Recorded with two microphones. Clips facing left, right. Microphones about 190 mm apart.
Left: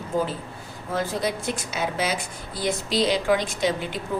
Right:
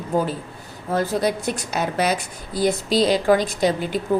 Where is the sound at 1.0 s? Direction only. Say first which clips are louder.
Right 4 dB; 40° right (ahead or behind).